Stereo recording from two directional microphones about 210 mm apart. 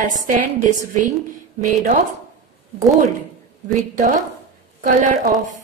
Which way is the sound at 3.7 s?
40° right (ahead or behind).